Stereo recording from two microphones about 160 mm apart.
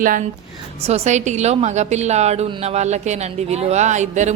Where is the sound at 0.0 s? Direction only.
60° right (ahead or behind).